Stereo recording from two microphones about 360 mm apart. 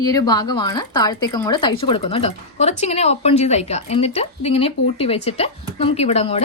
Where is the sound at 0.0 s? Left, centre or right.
Centre.